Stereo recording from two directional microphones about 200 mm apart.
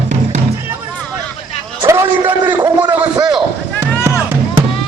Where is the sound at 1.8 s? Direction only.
15° right (ahead or behind).